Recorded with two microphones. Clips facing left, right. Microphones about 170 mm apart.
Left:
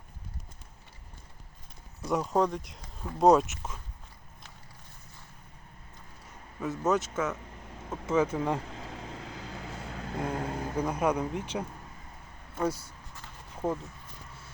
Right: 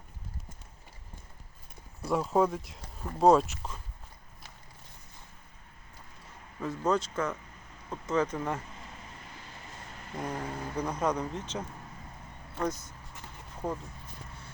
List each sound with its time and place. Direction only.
2.0 s speech: 5° right (ahead or behind)
6.6 s speech: 5° left (ahead or behind)
8.1 s speech: 10° left (ahead or behind)
8.7 s vehicle: 90° left
10.3 s speech: 10° left (ahead or behind)